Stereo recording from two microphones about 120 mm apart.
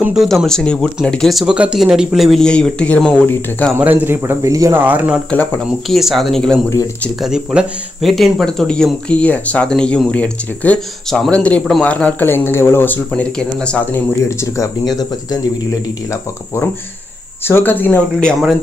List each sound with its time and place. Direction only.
0.0 s speech: 5° right (ahead or behind)
3.7 s speech: 15° right (ahead or behind)
4.8 s speech: 10° right (ahead or behind)
5.9 s speech: centre (ahead or behind)
11.9 s speech: 15° left (ahead or behind)
14.2 s speech: 25° left (ahead or behind)
17.5 s speech: 15° left (ahead or behind)